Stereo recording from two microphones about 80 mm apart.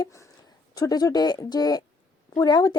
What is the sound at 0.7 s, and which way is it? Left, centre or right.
A woman's voice, left.